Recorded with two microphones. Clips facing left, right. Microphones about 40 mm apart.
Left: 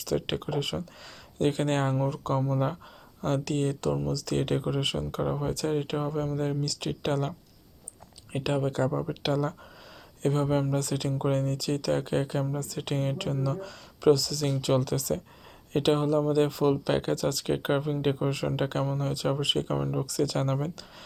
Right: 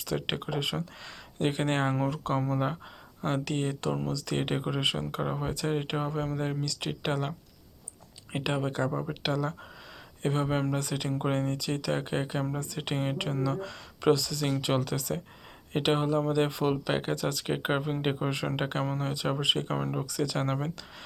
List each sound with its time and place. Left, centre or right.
0.0 s speech: centre
2.0 s speech: right
8.3 s speech: right; by 9.6 s centre
10.2 s speech: right
14.8 s speech: centre
16.8 s speech: centre